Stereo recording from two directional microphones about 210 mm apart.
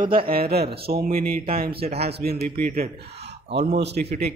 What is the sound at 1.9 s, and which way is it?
Mantra, 30° right (ahead or behind).